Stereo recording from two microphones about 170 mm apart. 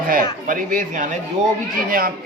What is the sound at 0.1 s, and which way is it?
A man's voice, 55° right (ahead or behind).